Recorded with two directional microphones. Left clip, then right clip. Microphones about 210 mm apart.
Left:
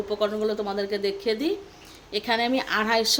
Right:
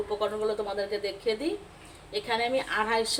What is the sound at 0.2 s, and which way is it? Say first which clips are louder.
A woman's voice: left 5 dB; 45° left (ahead or behind).